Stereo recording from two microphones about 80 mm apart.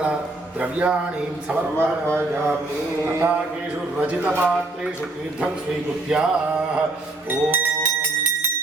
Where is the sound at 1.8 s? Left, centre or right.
Right.